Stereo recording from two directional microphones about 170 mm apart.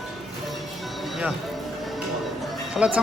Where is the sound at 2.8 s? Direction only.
10° right (ahead or behind).